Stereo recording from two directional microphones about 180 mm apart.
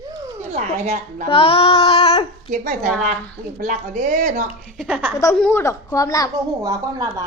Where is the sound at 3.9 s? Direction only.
40° right (ahead or behind).